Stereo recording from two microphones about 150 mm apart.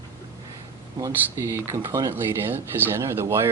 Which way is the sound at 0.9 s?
20° right (ahead or behind).